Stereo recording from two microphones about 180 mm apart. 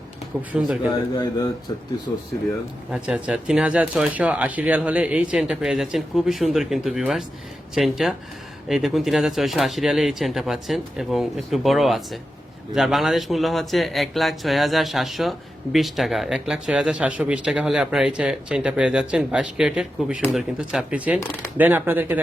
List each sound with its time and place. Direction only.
0.5 s speech: 5° right (ahead or behind)
0.9 s a man's voice: 20° left (ahead or behind)
2.9 s speech: 5° right (ahead or behind)